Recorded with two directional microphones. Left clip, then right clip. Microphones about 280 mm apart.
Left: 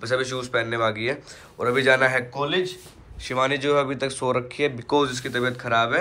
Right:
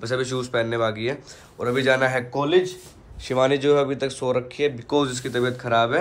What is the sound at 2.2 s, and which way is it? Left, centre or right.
A man's voice, right.